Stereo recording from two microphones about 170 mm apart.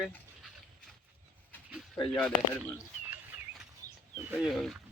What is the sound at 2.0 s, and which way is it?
Speech, 25° left (ahead or behind).